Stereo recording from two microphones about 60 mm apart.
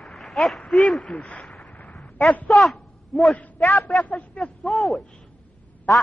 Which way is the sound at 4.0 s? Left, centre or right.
Centre.